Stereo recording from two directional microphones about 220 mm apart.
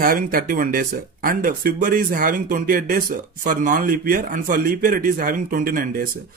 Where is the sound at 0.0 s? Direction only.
40° right (ahead or behind).